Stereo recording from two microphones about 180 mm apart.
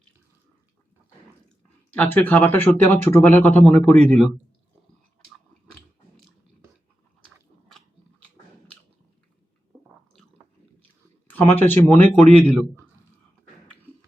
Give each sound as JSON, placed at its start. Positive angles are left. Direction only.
{"t": 1.9, "sound": "speech", "side_deg": 10}
{"t": 10.1, "sound": "squish", "side_deg": 0}
{"t": 11.3, "sound": "speech", "side_deg": 10}